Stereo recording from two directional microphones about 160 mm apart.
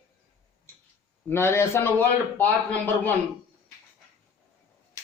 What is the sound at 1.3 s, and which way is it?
A man's voice, 15° left (ahead or behind).